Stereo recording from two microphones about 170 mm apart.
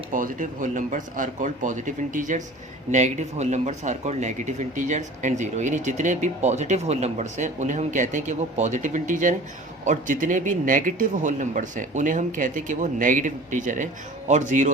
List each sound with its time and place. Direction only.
0.1 s speech: 50° right (ahead or behind)